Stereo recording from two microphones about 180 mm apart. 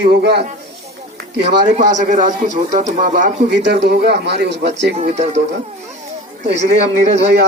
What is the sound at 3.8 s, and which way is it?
Speech, 65° right (ahead or behind).